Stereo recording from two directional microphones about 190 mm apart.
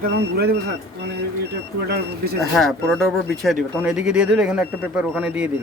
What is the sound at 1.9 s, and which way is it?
Speech, 55° right (ahead or behind).